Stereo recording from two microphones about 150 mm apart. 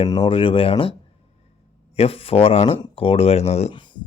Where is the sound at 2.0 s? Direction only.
40° left (ahead or behind).